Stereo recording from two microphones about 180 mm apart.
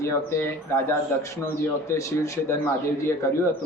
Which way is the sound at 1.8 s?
15° left (ahead or behind).